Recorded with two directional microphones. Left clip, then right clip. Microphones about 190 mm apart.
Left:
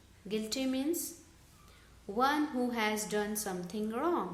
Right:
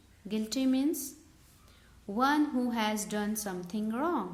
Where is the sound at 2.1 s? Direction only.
35° right (ahead or behind).